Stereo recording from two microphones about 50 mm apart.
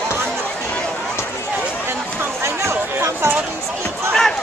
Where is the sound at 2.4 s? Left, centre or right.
Right.